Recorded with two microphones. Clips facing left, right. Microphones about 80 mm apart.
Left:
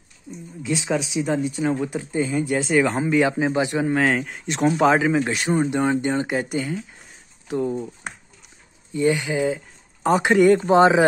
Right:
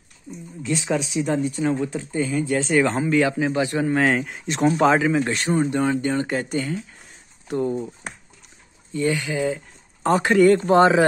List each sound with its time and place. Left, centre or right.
0.6 s speech: centre
2.7 s speech: centre
3.0 s speech: left
3.9 s speech: centre
8.9 s speech: centre